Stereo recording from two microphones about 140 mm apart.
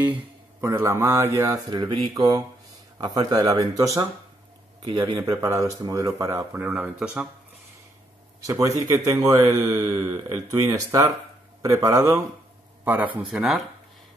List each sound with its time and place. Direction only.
0.0 s a man's voice: 15° right (ahead or behind)
8.5 s a man's voice: 25° right (ahead or behind); by 13.6 s 5° right (ahead or behind)